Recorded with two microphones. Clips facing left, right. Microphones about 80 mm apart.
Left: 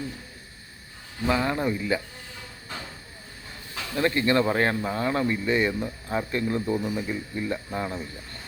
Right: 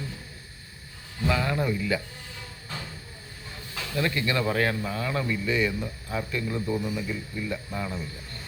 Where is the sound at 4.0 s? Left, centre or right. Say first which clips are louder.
Left 5 dB; left.